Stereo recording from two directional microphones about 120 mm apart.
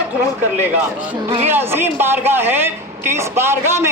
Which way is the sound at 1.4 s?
20° right (ahead or behind).